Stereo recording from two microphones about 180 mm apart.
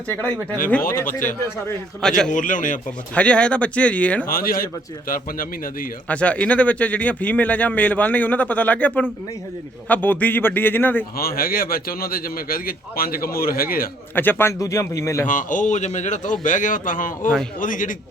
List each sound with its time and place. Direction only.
2.0 s a man's voice: 5° left (ahead or behind)
2.3 s a man's voice: 45° left (ahead or behind)
3.2 s speech: 5° left (ahead or behind)
4.3 s a man's voice: 55° left (ahead or behind)
6.1 s speech: 5° left (ahead or behind)
11.2 s speech: 55° left (ahead or behind)
14.2 s speech: 10° left (ahead or behind)
15.3 s a man's voice: 45° left (ahead or behind)